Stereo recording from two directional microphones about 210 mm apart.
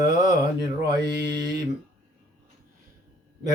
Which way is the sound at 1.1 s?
15° right (ahead or behind).